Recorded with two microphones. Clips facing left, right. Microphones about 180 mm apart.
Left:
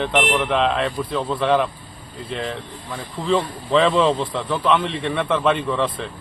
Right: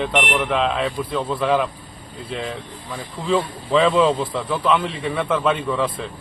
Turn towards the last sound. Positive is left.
turn(degrees=0)  # may be behind; listen again after turning